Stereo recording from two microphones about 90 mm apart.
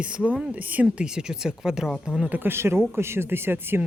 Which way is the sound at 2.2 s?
20° right (ahead or behind).